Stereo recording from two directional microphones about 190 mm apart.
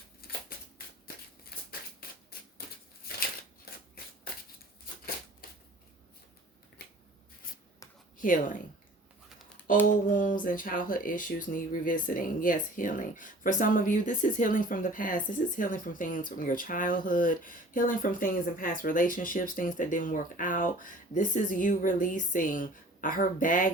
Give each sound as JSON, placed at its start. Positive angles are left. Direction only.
{"t": 0.2, "sound": "a sound", "side_deg": 50}
{"t": 2.3, "sound": "typewriter", "side_deg": 55}
{"t": 8.2, "sound": "speech", "side_deg": 45}
{"t": 9.9, "sound": "speech", "side_deg": 45}